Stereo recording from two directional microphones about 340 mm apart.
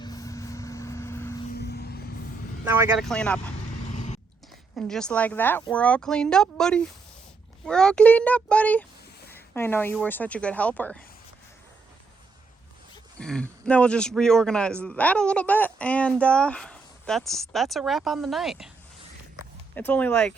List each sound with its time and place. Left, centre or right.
0.0 s vehicle: centre
1.5 s vehicle: left
2.7 s a man's voice: centre
3.9 s a sound: left
4.8 s a man's voice: centre
13.1 s a man's voice: centre
19.7 s a man's voice: centre